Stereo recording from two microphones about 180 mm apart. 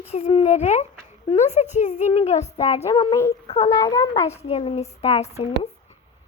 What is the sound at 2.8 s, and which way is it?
A child's voice, 20° left (ahead or behind).